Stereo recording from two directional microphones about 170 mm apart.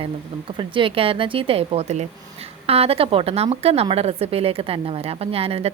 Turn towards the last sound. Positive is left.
turn(degrees=-35)  # may be behind; listen again after turning